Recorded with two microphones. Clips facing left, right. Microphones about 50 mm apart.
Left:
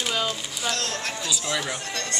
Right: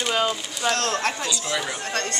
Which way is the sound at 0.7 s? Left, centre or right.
Right.